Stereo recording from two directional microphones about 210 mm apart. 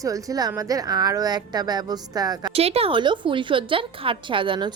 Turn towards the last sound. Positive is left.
turn(degrees=-20)  # may be behind; listen again after turning